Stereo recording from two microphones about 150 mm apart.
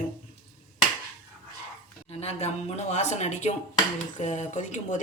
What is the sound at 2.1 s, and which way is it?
A woman's voice, 40° left (ahead or behind).